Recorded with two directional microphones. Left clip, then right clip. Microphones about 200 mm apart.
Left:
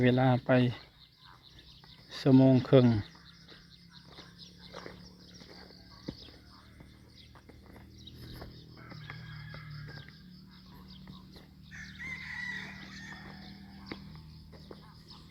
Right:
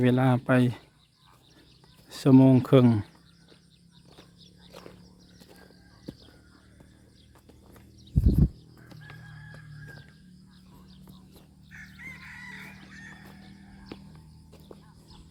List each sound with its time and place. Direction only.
0.0 s speech: 20° right (ahead or behind)
2.0 s speech: 25° right (ahead or behind)
4.7 s a sound: centre (ahead or behind)
8.1 s horse: 50° right (ahead or behind)
11.7 s chicken: 60° right (ahead or behind)